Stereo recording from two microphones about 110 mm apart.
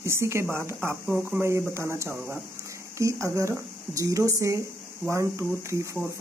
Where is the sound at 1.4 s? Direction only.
25° right (ahead or behind).